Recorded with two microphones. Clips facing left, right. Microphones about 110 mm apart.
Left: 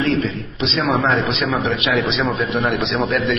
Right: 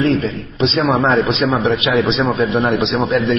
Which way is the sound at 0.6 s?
35° right (ahead or behind).